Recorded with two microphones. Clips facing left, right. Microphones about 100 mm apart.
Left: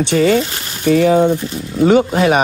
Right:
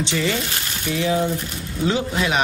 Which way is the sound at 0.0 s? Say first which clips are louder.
Left 10 dB; 55° left (ahead or behind).